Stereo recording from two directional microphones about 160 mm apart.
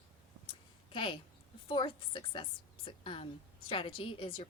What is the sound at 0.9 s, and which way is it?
A woman's voice, 30° left (ahead or behind).